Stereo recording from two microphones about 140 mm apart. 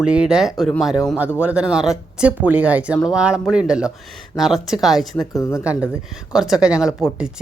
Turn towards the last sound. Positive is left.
turn(degrees=-5)  # may be behind; listen again after turning